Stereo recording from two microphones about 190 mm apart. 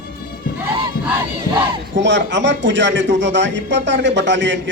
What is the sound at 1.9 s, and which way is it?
A man's voice, 70° right (ahead or behind).